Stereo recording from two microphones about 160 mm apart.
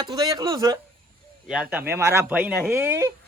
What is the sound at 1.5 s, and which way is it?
Speech, 10° right (ahead or behind).